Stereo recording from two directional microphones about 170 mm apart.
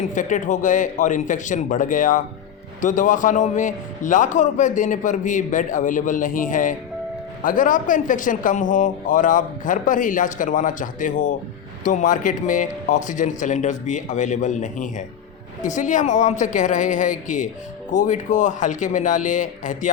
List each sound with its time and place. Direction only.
0.1 s a man's voice: 50° left (ahead or behind)